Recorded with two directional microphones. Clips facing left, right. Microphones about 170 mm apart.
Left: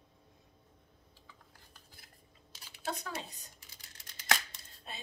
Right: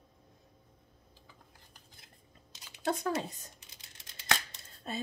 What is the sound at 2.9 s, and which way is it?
Speech, 50° right (ahead or behind).